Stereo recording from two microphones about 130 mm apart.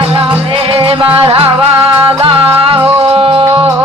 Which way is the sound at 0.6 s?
45° right (ahead or behind).